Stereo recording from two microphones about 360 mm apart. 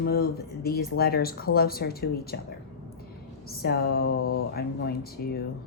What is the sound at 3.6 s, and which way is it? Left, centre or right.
A woman's voice, left.